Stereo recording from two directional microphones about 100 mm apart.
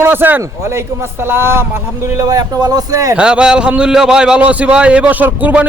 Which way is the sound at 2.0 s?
35° right (ahead or behind).